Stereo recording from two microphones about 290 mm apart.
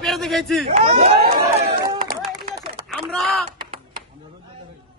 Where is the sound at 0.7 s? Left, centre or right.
Right.